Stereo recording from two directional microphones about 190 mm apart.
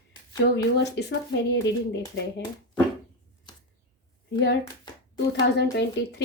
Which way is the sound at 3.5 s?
25° left (ahead or behind).